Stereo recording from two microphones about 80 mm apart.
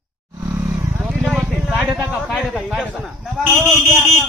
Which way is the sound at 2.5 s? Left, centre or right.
Centre.